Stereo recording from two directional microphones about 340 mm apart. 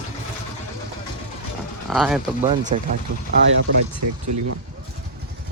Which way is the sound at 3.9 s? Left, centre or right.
Right.